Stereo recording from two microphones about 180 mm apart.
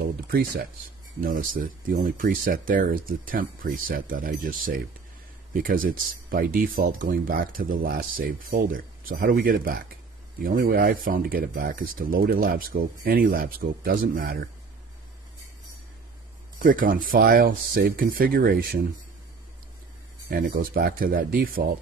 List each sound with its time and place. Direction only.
0.0 s speech: 55° right (ahead or behind)
16.5 s speech: 50° right (ahead or behind)
20.2 s speech: 50° right (ahead or behind)